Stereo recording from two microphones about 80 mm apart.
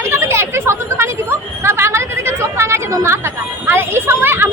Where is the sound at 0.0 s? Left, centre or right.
Right.